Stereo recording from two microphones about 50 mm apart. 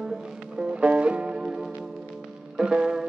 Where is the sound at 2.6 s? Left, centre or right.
Centre.